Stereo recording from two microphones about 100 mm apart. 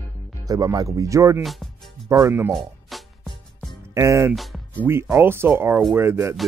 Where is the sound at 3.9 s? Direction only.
30° right (ahead or behind).